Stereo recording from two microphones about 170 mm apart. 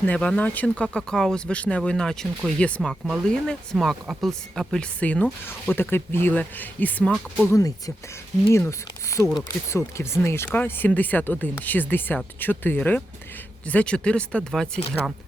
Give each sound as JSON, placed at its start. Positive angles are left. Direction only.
{"t": 0.0, "sound": "speech", "side_deg": 10}
{"t": 7.5, "sound": "speech", "side_deg": 20}